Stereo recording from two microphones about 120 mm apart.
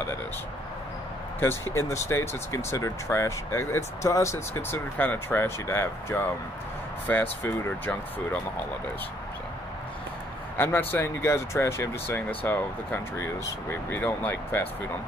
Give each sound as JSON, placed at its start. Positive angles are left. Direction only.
{"t": 1.4, "sound": "speech", "side_deg": 20}
{"t": 10.6, "sound": "speech", "side_deg": 20}